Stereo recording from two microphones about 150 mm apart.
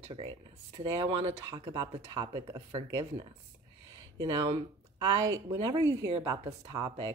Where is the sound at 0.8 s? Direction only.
25° right (ahead or behind).